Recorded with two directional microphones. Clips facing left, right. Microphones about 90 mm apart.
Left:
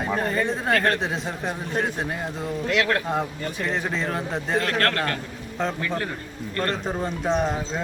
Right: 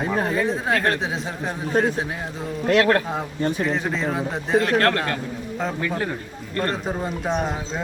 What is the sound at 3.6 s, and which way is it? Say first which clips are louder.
A man's voice: right 2 dB; centre (ahead or behind).